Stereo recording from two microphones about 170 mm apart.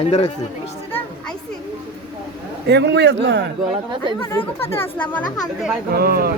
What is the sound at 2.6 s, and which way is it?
Speech, 80° right.